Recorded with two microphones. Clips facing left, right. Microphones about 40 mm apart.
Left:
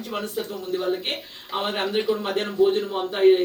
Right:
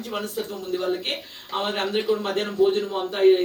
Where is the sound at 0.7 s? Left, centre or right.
Centre.